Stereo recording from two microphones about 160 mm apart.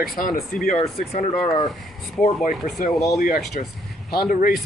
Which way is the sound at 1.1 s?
40° left (ahead or behind).